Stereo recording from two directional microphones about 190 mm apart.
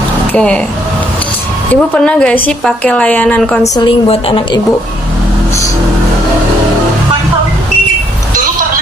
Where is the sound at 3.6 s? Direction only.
20° left (ahead or behind).